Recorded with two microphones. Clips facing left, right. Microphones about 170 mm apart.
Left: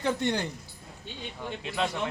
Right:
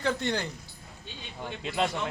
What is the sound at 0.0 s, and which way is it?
Speech, 15° left (ahead or behind).